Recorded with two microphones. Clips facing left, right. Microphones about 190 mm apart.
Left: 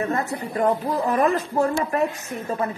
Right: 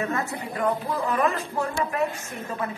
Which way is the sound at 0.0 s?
35° left (ahead or behind).